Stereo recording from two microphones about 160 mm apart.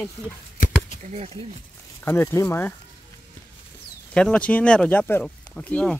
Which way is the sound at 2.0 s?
15° left (ahead or behind).